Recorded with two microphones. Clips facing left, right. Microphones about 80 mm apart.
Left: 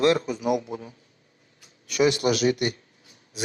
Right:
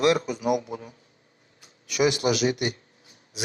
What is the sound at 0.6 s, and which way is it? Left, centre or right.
Speech, centre.